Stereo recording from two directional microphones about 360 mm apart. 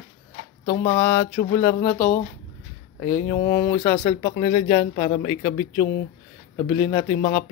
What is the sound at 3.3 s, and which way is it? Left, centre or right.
Speech, centre.